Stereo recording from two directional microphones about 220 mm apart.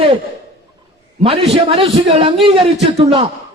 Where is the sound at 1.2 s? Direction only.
25° right (ahead or behind).